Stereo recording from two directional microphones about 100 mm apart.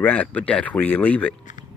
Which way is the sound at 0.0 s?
15° left (ahead or behind).